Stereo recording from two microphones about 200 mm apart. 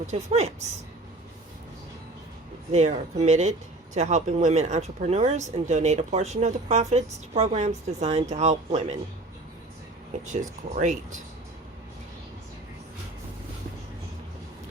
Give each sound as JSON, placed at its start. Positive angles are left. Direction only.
{"t": 0.1, "sound": "speech", "side_deg": -35}
{"t": 2.7, "sound": "speech", "side_deg": -35}
{"t": 10.2, "sound": "speech", "side_deg": -35}